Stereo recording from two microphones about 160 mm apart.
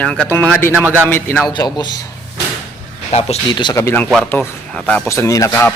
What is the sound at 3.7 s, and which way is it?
Speech, 15° left (ahead or behind).